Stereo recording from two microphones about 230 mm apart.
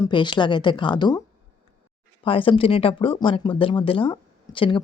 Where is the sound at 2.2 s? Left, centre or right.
Left.